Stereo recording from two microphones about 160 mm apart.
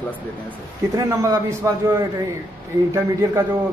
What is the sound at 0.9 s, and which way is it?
Speech, 20° right (ahead or behind).